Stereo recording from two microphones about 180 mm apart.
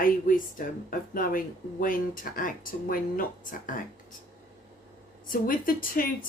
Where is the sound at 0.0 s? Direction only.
50° left (ahead or behind).